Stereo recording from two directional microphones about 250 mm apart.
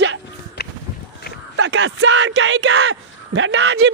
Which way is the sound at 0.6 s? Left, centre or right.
Left.